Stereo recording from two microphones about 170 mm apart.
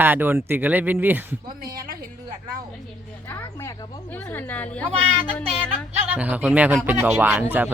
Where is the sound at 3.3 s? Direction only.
15° left (ahead or behind).